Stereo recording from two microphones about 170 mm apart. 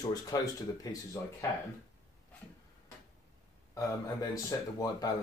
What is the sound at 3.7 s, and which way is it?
Speech, 20° left (ahead or behind).